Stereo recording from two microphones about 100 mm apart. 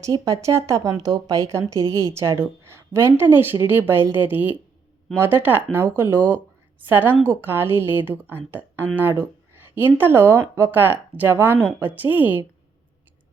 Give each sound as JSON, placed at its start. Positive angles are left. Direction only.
{"t": 0.0, "sound": "speech", "side_deg": -35}